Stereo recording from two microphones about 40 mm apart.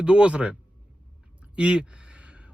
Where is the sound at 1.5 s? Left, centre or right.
Right.